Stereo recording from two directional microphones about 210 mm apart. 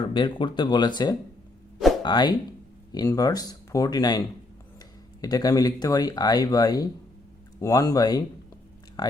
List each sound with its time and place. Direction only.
0.0 s speech: 20° left (ahead or behind)
5.2 s speech: 15° left (ahead or behind)